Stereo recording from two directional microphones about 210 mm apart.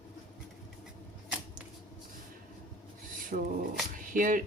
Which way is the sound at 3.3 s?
40° right (ahead or behind).